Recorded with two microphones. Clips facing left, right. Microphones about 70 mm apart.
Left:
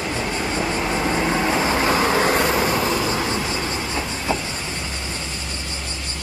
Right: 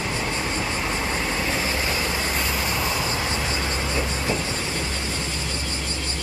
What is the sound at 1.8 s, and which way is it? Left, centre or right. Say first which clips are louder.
Vehicle: left 8 dB; left.